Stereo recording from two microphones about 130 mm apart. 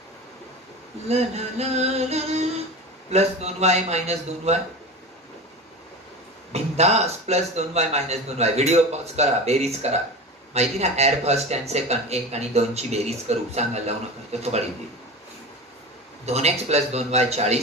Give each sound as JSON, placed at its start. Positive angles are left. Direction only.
{"t": 1.0, "sound": "speech", "side_deg": -55}
{"t": 6.5, "sound": "speech", "side_deg": -55}
{"t": 16.3, "sound": "speech", "side_deg": -55}